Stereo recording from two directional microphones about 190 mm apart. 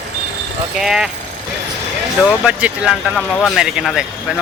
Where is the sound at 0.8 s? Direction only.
5° right (ahead or behind).